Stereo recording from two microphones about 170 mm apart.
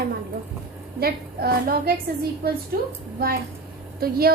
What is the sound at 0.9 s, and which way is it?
A woman's voice, 65° right (ahead or behind).